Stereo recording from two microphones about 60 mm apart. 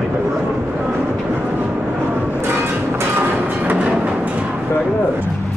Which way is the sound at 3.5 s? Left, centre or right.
Right.